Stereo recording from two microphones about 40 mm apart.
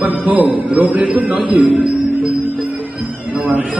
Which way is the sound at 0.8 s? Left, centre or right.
Right.